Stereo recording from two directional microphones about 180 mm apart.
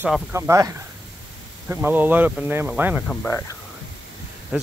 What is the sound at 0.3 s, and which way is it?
Speech, 15° right (ahead or behind).